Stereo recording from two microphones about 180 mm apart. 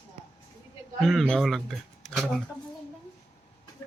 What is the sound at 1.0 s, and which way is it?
Speech, centre (ahead or behind).